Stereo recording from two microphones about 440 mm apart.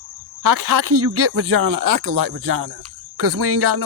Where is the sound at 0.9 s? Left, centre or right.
Right.